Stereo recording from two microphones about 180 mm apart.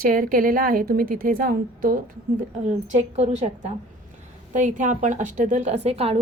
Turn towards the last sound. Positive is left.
turn(degrees=-35)  # may be behind; listen again after turning